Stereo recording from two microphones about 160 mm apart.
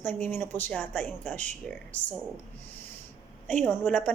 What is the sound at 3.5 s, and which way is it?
Speech, 10° left (ahead or behind).